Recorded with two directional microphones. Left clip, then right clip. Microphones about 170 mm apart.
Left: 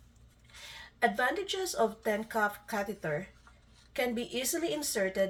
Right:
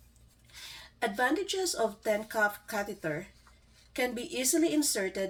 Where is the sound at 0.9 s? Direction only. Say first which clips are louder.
Even; 30° right (ahead or behind).